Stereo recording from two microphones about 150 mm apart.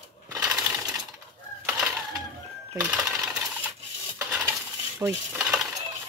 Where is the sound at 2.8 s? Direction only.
5° right (ahead or behind).